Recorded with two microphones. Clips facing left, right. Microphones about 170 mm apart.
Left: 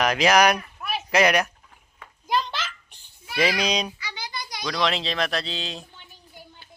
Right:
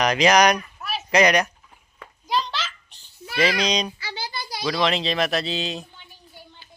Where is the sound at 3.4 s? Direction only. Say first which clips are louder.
Right 1 dB; 5° left (ahead or behind).